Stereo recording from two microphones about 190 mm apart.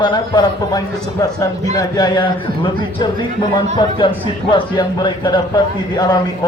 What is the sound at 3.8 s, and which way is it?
Speech, 25° left (ahead or behind).